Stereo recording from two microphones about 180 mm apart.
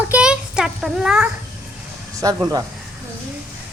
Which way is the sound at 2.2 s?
20° right (ahead or behind).